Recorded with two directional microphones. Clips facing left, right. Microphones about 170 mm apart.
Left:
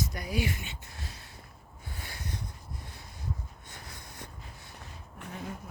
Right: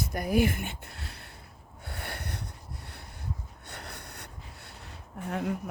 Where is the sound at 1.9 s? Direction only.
65° right (ahead or behind).